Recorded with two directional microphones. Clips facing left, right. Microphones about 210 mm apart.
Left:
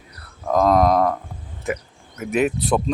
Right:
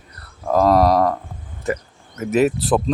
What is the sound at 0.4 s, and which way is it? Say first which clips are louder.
Speech: right 2 dB; centre (ahead or behind).